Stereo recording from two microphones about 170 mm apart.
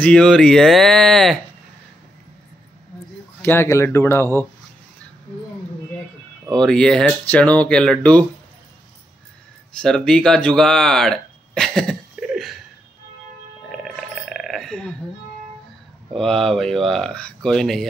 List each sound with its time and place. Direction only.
0.0 s speech: 5° left (ahead or behind)
3.4 s speech: 15° left (ahead or behind)
6.5 s speech: 5° left (ahead or behind)
9.7 s speech: 5° left (ahead or behind)
13.7 s burping: centre (ahead or behind)
16.2 s speech: 5° left (ahead or behind)